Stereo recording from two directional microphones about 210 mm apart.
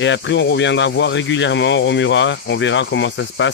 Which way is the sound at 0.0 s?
60° left (ahead or behind).